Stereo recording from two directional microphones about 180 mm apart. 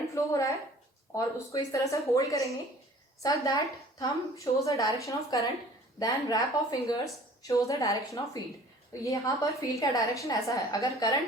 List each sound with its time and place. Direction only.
0.1 s a woman's voice: 15° left (ahead or behind)
4.6 s a woman's voice: 20° left (ahead or behind)